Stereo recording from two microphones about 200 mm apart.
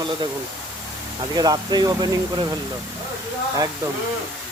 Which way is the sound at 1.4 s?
20° right (ahead or behind).